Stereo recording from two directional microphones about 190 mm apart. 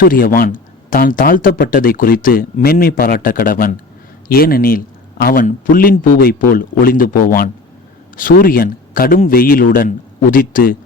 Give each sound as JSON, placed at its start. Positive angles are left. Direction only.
{"t": 0.0, "sound": "speech", "side_deg": 50}